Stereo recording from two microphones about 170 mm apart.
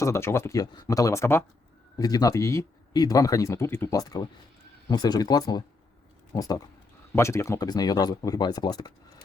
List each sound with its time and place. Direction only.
0.0 s speech: 15° left (ahead or behind)